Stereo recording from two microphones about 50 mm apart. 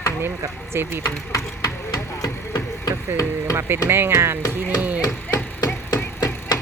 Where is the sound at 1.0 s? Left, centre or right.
Left.